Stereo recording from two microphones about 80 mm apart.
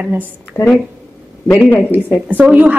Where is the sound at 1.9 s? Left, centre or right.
Right.